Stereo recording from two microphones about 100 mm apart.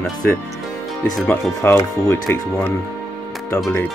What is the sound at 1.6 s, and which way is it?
Speech, 25° left (ahead or behind).